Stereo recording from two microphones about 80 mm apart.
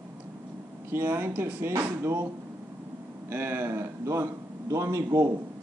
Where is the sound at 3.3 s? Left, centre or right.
Right.